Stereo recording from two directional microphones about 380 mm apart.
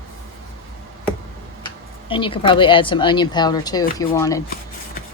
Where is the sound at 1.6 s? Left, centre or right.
Centre.